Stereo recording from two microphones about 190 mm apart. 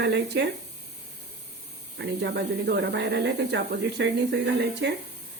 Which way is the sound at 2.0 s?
65° right (ahead or behind).